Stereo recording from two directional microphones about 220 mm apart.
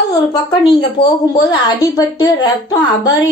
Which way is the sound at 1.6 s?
15° left (ahead or behind).